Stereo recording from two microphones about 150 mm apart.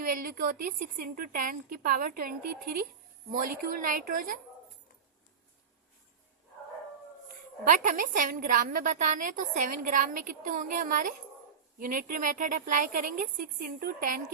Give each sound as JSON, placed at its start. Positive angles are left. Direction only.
{"t": 0.0, "sound": "speech", "side_deg": -75}
{"t": 7.7, "sound": "a woman's voice", "side_deg": -60}